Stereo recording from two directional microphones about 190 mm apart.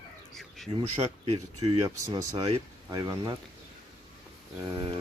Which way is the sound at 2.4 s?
35° right (ahead or behind).